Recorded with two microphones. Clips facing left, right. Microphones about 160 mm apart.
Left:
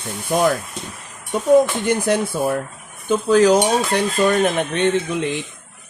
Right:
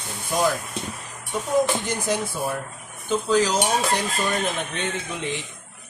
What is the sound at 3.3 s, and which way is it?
Speech, 60° left (ahead or behind).